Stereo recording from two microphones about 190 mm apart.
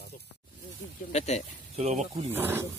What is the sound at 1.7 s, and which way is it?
Speech, 35° right (ahead or behind).